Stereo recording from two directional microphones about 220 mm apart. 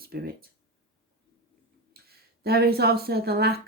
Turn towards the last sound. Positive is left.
turn(degrees=-45)  # may be behind; listen again after turning